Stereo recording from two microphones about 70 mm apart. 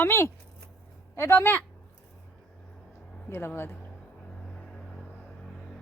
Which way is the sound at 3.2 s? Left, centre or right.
Left.